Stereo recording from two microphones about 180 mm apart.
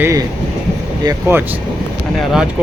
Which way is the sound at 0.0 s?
15° right (ahead or behind).